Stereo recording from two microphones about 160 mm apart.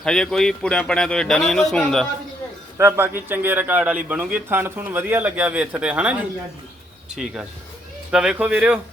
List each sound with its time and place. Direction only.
0.0 s speech: 5° left (ahead or behind)
2.7 s speech: 15° right (ahead or behind)
8.1 s speech: 5° right (ahead or behind)